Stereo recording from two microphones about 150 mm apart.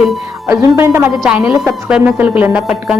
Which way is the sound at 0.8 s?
15° right (ahead or behind).